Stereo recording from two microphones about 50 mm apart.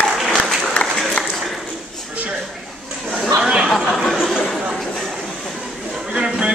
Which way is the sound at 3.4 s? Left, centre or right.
Centre.